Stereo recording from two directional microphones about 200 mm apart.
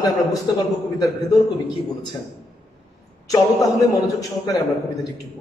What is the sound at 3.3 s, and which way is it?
Speech, 15° left (ahead or behind).